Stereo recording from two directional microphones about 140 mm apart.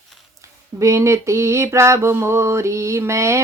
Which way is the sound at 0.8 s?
20° right (ahead or behind).